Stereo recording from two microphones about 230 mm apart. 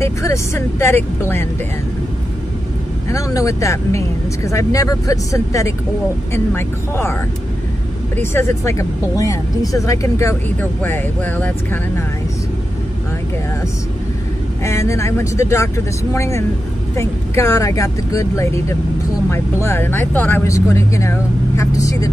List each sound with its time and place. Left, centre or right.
0.0 s speech: centre
3.1 s speech: centre
8.2 s speech: centre
14.6 s speech: centre